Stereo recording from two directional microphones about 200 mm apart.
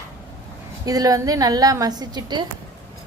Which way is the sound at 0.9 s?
20° right (ahead or behind).